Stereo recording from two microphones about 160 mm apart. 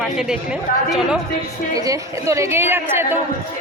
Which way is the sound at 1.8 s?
20° right (ahead or behind).